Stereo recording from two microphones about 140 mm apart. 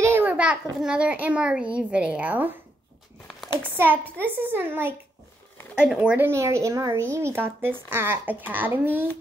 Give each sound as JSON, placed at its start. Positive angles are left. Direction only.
{"t": 0.0, "sound": "a child's voice", "side_deg": -15}
{"t": 3.7, "sound": "speech", "side_deg": -15}